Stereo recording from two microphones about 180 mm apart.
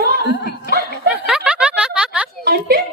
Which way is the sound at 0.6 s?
60° right (ahead or behind).